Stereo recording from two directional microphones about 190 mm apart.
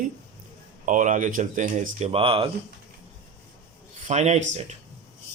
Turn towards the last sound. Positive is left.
turn(degrees=-35)  # may be behind; listen again after turning